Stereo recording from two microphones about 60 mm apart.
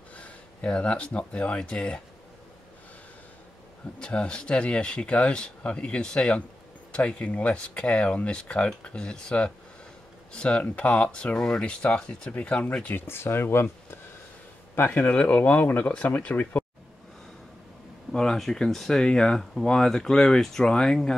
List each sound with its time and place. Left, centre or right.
0.1 s speech: centre
4.0 s speech: centre
12.8 s speech: left
18.1 s speech: centre